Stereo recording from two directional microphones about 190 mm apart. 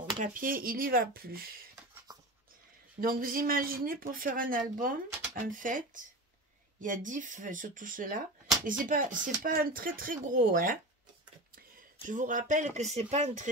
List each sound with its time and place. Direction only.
0.2 s speech: 45° right (ahead or behind)
3.0 s speech: 50° right (ahead or behind)